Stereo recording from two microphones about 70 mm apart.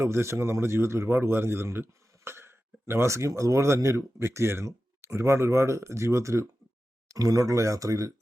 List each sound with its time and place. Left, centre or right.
0.0 s speech: right
7.1 s speech: right